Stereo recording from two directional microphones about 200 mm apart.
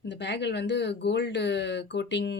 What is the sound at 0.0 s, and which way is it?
Speech, 60° left (ahead or behind).